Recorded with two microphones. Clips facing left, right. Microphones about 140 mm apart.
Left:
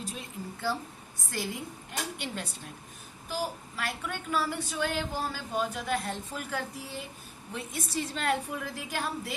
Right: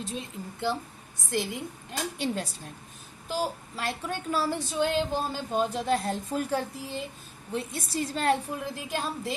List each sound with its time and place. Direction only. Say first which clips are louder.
0.0 s a woman's voice: right 3 dB; 25° right (ahead or behind)
2.1 s a woman's voice: right 7 dB; 35° right (ahead or behind)
3.2 s a woman's voice: right 3 dB; 25° right (ahead or behind)